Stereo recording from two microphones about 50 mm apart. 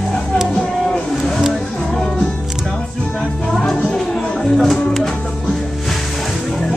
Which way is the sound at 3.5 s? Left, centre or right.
Centre.